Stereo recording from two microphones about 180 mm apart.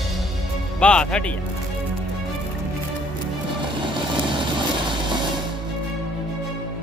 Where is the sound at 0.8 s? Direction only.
5° left (ahead or behind).